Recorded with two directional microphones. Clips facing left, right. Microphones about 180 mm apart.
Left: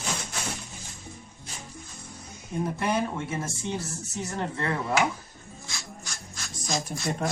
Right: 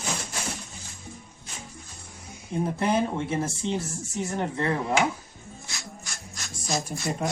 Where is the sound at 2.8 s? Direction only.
25° right (ahead or behind).